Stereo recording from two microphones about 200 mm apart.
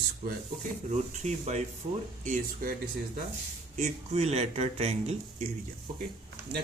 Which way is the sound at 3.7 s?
35° right (ahead or behind).